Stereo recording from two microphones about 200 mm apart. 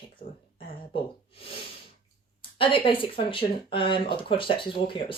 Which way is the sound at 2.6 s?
25° left (ahead or behind).